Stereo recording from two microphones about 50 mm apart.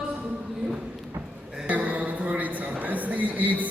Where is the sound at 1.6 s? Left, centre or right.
Right.